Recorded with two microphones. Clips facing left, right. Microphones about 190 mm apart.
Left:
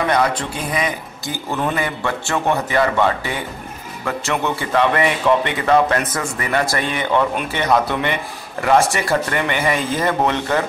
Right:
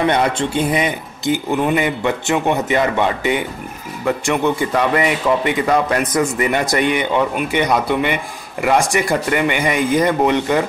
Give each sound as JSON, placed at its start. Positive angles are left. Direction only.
{"t": 0.0, "sound": "a man's voice", "side_deg": -25}